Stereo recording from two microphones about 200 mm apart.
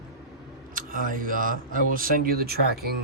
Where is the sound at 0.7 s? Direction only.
45° right (ahead or behind).